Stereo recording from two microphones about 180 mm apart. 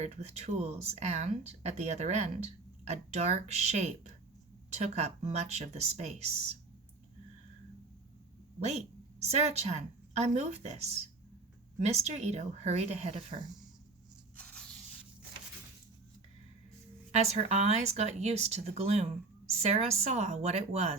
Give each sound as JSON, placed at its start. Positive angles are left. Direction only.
{"t": 0.0, "sound": "speech", "side_deg": -35}
{"t": 8.6, "sound": "a woman's voice", "side_deg": -35}
{"t": 14.3, "sound": "spray", "side_deg": 5}
{"t": 17.1, "sound": "speech", "side_deg": -35}